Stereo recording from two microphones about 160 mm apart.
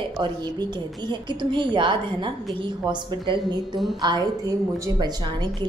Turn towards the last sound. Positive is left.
turn(degrees=-25)  # may be behind; listen again after turning